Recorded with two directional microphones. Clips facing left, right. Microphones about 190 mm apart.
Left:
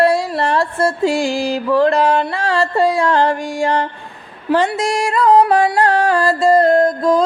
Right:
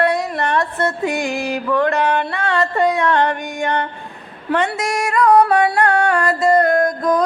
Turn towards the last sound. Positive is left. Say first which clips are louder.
# left 3 dB
turn(degrees=30)  # may be behind; listen again after turning